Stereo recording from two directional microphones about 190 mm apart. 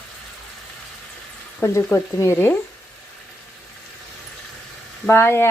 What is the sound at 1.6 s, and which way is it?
Speech, 15° left (ahead or behind).